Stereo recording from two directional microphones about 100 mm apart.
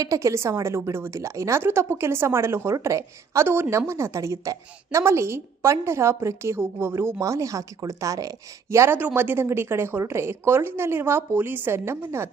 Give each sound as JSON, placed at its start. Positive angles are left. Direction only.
{"t": 0.0, "sound": "a woman's voice", "side_deg": -30}
{"t": 9.0, "sound": "a woman's voice", "side_deg": -15}